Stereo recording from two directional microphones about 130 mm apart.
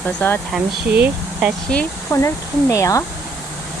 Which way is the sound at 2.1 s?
20° left (ahead or behind).